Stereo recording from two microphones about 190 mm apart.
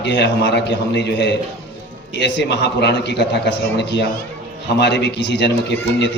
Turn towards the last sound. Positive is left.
turn(degrees=65)  # may be behind; listen again after turning